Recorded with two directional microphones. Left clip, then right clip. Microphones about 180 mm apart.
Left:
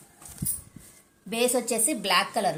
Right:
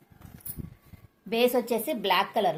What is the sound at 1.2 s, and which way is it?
A woman's voice, 40° right (ahead or behind).